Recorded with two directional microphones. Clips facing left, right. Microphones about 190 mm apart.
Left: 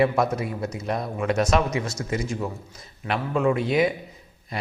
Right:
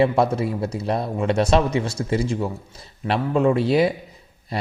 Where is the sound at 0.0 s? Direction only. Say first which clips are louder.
Right 3 dB; 30° right (ahead or behind).